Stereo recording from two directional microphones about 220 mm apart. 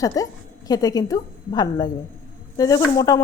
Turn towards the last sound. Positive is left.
turn(degrees=15)  # may be behind; listen again after turning